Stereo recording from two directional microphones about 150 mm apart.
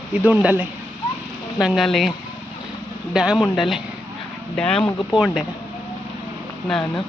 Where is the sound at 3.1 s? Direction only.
5° right (ahead or behind).